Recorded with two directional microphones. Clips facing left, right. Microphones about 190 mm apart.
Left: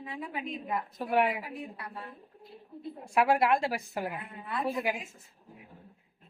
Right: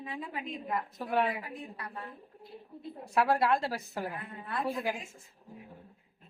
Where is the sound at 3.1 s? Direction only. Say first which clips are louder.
Left 2 dB; 15° left (ahead or behind).